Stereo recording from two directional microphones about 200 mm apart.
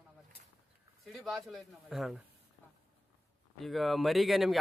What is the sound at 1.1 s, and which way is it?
Speech, centre (ahead or behind).